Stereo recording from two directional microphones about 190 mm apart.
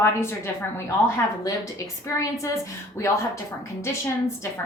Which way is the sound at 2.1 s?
15° left (ahead or behind).